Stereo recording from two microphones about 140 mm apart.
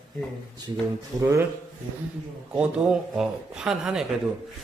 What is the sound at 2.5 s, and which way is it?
Speech, 10° right (ahead or behind).